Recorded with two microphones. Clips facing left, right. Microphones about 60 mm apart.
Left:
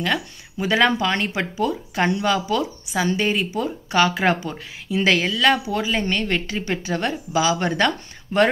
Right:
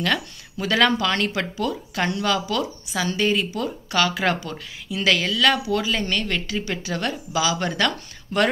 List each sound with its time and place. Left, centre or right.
0.0 s speech: centre